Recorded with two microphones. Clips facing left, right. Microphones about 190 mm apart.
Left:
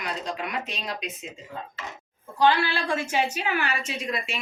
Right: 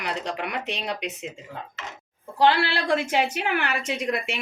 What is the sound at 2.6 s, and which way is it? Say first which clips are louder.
A woman's voice: right 3 dB; 65° right (ahead or behind).